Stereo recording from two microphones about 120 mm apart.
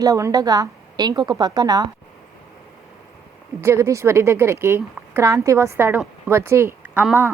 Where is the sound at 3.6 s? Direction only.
25° right (ahead or behind).